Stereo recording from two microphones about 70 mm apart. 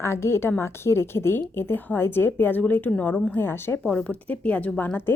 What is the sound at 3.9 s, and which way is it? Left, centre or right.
A woman's voice, left.